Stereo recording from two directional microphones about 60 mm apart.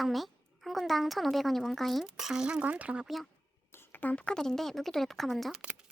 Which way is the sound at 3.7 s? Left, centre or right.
Left.